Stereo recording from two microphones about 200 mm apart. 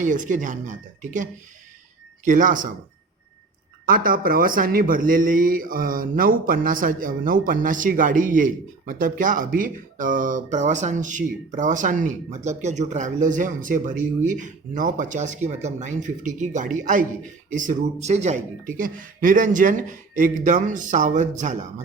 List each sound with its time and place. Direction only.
0.0 s speech: 40° right (ahead or behind)
3.8 s speech: 45° right (ahead or behind)